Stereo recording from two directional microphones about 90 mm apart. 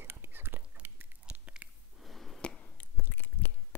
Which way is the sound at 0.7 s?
25° right (ahead or behind).